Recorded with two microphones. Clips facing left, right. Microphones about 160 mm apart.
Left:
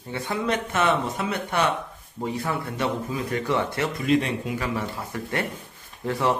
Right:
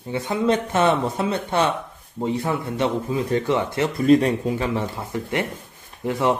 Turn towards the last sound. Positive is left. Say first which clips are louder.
# right 3 dB
turn(degrees=-15)  # may be behind; listen again after turning